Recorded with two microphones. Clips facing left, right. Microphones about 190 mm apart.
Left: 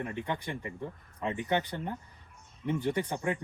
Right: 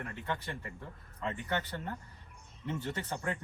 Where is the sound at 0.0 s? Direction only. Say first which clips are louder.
Left 4 dB; 15° left (ahead or behind).